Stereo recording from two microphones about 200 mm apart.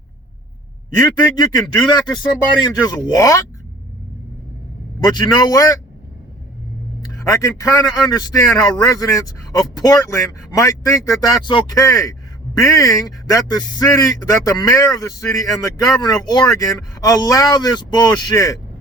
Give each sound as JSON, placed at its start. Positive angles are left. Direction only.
{"t": 1.2, "sound": "speech", "side_deg": 20}
{"t": 4.9, "sound": "speech", "side_deg": 20}
{"t": 7.0, "sound": "speech", "side_deg": 15}